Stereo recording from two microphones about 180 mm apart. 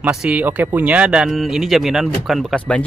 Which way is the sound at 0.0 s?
5° right (ahead or behind).